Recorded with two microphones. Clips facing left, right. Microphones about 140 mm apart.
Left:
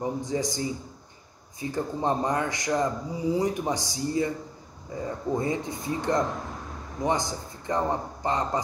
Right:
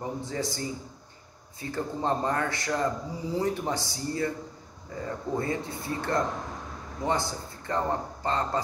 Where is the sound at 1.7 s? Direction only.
15° left (ahead or behind).